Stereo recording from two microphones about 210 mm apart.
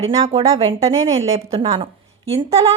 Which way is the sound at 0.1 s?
30° right (ahead or behind).